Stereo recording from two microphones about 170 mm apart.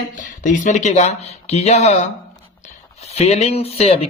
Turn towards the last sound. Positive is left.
turn(degrees=35)  # may be behind; listen again after turning